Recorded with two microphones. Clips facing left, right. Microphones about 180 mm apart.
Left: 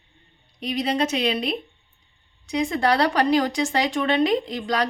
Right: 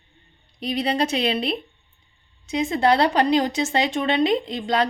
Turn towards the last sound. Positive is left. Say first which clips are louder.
# right 1 dB
turn(degrees=-25)  # may be behind; listen again after turning